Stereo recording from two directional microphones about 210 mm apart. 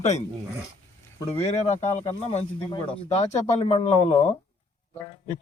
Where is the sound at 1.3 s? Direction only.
30° left (ahead or behind).